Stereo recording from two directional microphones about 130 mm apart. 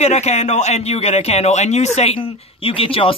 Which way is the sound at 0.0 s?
55° left (ahead or behind).